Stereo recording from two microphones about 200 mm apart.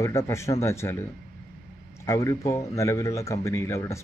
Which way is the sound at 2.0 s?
15° left (ahead or behind).